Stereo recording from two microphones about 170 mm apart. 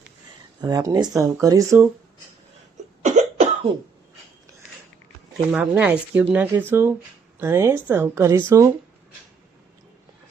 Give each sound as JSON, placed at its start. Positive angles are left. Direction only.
{"t": 0.6, "sound": "speech", "side_deg": -20}
{"t": 3.0, "sound": "cough", "side_deg": -45}
{"t": 5.5, "sound": "speech", "side_deg": -5}